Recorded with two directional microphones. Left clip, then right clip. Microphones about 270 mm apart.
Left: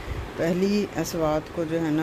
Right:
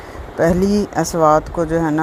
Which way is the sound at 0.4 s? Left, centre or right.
Right.